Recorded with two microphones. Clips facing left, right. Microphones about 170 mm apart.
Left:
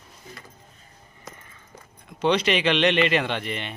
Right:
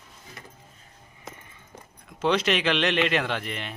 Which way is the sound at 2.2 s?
Centre (ahead or behind).